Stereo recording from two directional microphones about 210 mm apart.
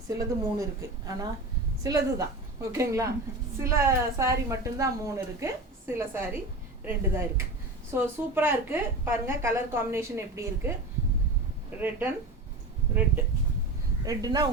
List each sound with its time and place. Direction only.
0.1 s a woman's voice: 15° right (ahead or behind)
11.8 s a woman's voice: 10° right (ahead or behind)
14.0 s a woman's voice: 15° right (ahead or behind)